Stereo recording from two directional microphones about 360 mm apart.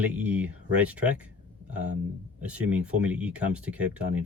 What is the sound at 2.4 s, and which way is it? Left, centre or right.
Speech, centre.